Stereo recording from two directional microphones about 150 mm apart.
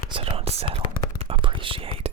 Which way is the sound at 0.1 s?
40° right (ahead or behind).